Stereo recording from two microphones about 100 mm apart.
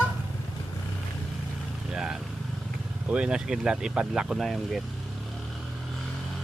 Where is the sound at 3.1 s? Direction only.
10° right (ahead or behind).